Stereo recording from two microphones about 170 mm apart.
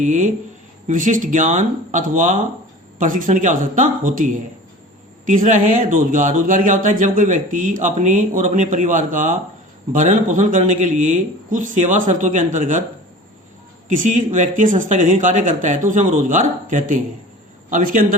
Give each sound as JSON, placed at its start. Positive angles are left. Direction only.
{"t": 0.0, "sound": "a man's voice", "side_deg": -45}
{"t": 13.8, "sound": "a man's voice", "side_deg": -50}